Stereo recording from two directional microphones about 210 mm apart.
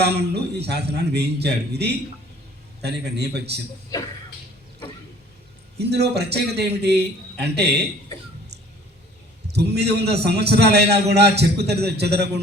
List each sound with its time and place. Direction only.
0.0 s a man's voice: 50° right (ahead or behind)
5.7 s a man's voice: 50° right (ahead or behind)
9.5 s a man's voice: 50° right (ahead or behind)